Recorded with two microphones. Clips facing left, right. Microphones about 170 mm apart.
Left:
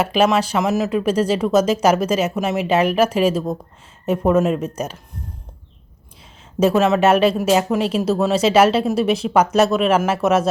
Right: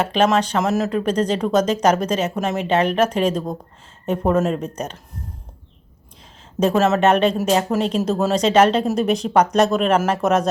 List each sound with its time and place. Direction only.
0.0 s speech: 10° left (ahead or behind)
6.6 s speech: 5° left (ahead or behind)